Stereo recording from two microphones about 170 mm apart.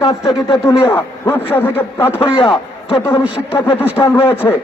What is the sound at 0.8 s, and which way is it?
Music, 15° left (ahead or behind).